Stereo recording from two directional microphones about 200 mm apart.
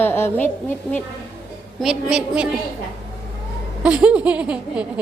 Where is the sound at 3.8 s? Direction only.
5° right (ahead or behind).